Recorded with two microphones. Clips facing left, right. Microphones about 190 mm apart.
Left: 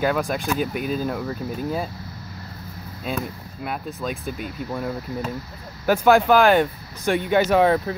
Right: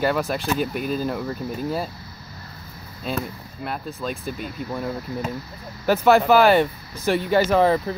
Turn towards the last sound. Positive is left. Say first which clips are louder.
# even
turn(degrees=0)  # may be behind; listen again after turning